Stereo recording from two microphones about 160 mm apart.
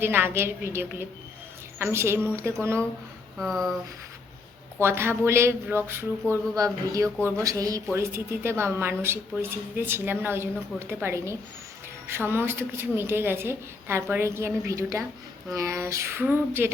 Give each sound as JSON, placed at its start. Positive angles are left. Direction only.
{"t": 0.0, "sound": "a woman's voice", "side_deg": -15}
{"t": 3.3, "sound": "speech", "side_deg": 0}
{"t": 4.8, "sound": "a woman's voice", "side_deg": -15}